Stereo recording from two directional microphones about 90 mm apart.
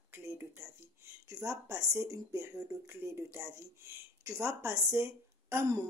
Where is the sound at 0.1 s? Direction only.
25° right (ahead or behind).